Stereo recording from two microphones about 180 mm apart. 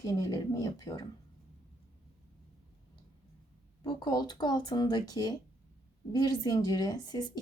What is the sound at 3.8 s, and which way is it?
Speech, 20° left (ahead or behind).